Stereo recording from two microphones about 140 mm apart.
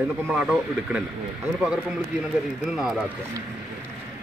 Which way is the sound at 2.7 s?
5° right (ahead or behind).